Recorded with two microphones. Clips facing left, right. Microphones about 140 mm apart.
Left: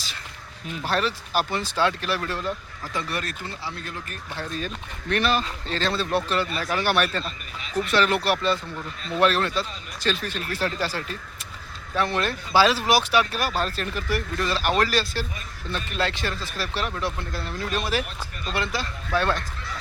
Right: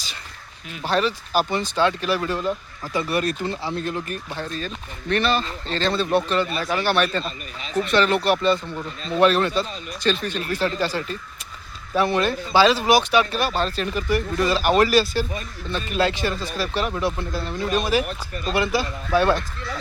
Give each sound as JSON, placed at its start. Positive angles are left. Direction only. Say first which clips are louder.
{"t": 0.9, "sound": "speech", "louder": "right 4 dB", "side_deg": 0}
{"t": 3.2, "sound": "speech", "louder": "right 9 dB", "side_deg": -20}
{"t": 4.4, "sound": "speech", "louder": "right 1 dB", "side_deg": 5}
{"t": 7.3, "sound": "speech", "louder": "right 3 dB", "side_deg": -25}
{"t": 7.9, "sound": "speech", "louder": "right 3 dB", "side_deg": 5}